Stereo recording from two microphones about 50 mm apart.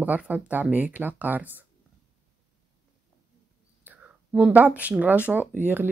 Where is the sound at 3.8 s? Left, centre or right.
Right.